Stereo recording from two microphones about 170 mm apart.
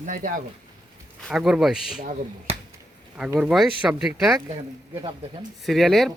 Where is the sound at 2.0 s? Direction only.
45° right (ahead or behind).